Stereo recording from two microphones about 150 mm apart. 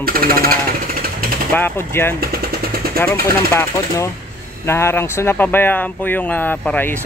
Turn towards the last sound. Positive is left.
turn(degrees=15)  # may be behind; listen again after turning